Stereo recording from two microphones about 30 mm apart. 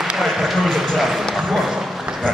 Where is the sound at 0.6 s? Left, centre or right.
Centre.